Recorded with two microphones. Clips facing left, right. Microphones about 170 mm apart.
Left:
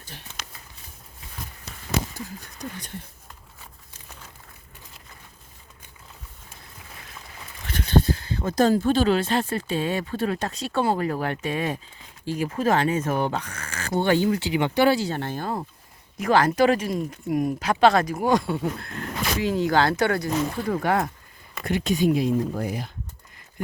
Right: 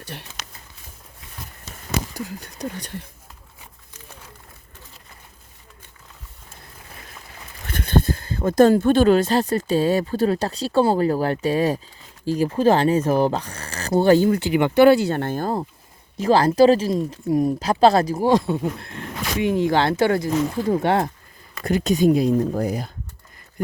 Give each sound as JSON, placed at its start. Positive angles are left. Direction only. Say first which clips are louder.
{"t": 0.0, "sound": "speech", "louder": "right 8 dB", "side_deg": -65}
{"t": 2.1, "sound": "speech", "louder": "right 5 dB", "side_deg": -75}
{"t": 7.7, "sound": "speech", "louder": "right 1 dB", "side_deg": -50}
{"t": 16.1, "sound": "speech", "louder": "right 4 dB", "side_deg": -30}
{"t": 21.6, "sound": "speech", "louder": "right 4 dB", "side_deg": -40}